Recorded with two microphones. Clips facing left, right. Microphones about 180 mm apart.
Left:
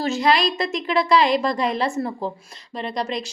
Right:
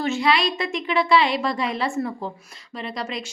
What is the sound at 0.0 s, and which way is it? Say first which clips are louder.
A woman's voice: left 2 dB; 40° left (ahead or behind).